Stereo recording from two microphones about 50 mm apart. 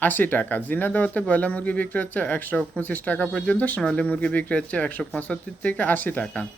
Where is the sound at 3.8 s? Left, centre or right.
Left.